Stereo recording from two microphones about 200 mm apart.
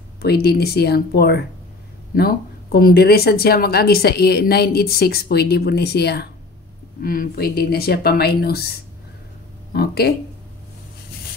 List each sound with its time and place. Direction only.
0.2 s speech: 50° left (ahead or behind)